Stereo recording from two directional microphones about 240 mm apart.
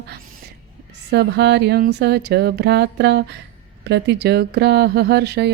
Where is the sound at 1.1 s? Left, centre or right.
Right.